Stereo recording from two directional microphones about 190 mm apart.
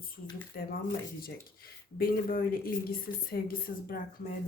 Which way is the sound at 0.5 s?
60° left (ahead or behind).